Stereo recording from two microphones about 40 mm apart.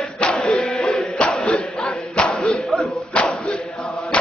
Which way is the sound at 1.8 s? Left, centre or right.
Left.